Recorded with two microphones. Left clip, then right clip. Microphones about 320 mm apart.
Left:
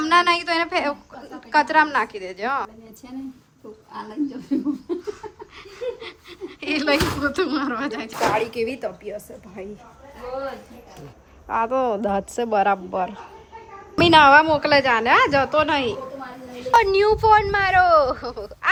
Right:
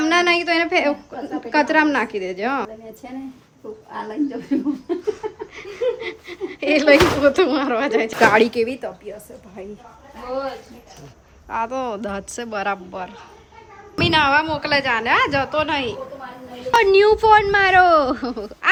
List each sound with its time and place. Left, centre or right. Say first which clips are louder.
0.0 s a woman's voice: right 1 dB; centre
8.4 s a woman's voice: right 8 dB; right
8.8 s speech: left 1 dB; centre
11.4 s speech: left 3 dB; centre